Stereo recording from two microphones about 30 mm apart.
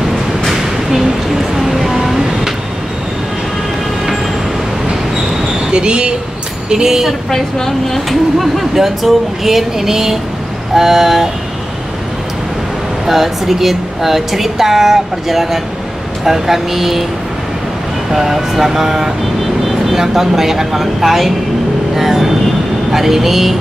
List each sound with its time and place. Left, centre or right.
0.5 s vehicle: centre
5.7 s speech: right
6.7 s a woman's voice: centre
7.2 s a woman's voice: centre
8.1 s a woman's voice: centre
13.0 s a woman's voice: centre
18.1 s a woman's voice: centre
21.9 s vehicle: centre
22.8 s a woman's voice: centre